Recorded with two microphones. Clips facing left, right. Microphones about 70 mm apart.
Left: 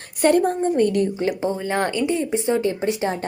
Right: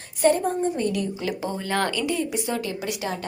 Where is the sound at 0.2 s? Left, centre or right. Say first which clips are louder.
Left 3 dB; left.